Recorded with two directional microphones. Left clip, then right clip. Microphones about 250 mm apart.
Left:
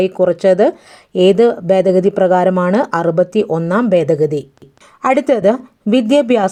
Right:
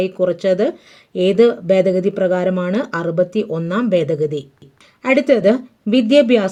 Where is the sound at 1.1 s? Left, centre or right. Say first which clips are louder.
Left 3 dB; left.